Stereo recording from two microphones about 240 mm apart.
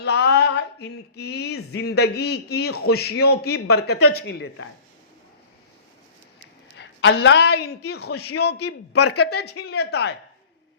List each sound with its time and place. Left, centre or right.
0.0 s a man's voice: left
6.7 s a woman's voice: left
8.5 s speech: left
9.3 s a man's voice: left